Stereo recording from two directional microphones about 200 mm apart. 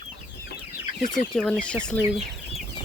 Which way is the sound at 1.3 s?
5° left (ahead or behind).